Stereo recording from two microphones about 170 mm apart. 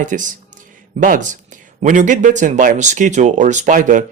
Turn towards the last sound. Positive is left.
turn(degrees=-50)  # may be behind; listen again after turning